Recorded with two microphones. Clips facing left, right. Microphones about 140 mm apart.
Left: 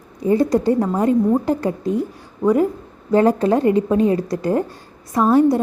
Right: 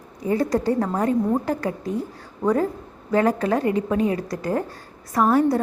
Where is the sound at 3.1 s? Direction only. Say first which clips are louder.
Left 5 dB; 25° left (ahead or behind).